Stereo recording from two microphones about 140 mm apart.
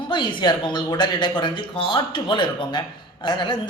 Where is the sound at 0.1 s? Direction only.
35° left (ahead or behind).